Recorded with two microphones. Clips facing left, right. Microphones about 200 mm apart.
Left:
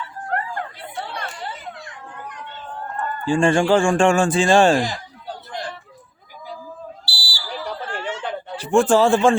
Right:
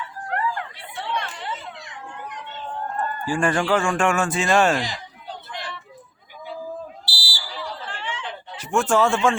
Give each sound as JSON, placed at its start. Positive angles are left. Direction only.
{"t": 0.3, "sound": "chatter", "side_deg": 40}
{"t": 3.2, "sound": "speech", "side_deg": 25}
{"t": 4.8, "sound": "a sound", "side_deg": 45}
{"t": 7.0, "sound": "fire alarm", "side_deg": -20}
{"t": 7.6, "sound": "chatter", "side_deg": 50}
{"t": 8.5, "sound": "speech", "side_deg": 30}